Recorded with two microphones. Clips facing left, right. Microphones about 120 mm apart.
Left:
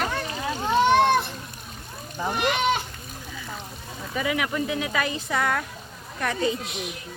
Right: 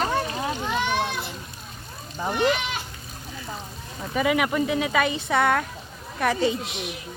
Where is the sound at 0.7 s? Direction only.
40° left (ahead or behind).